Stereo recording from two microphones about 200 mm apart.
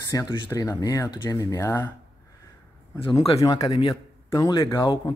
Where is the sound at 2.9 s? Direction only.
25° left (ahead or behind).